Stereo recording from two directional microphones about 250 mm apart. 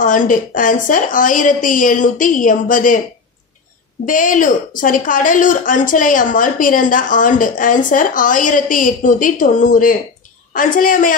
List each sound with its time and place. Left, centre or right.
0.0 s a woman's voice: left
4.0 s a woman's voice: left